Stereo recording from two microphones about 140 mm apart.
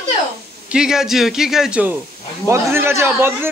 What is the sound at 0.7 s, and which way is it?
A man's voice, 5° right (ahead or behind).